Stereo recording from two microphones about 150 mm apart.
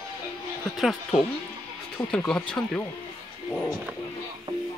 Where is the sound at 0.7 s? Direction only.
Centre (ahead or behind).